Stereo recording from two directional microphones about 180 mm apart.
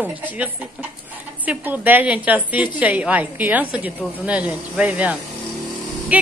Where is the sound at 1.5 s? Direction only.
10° right (ahead or behind).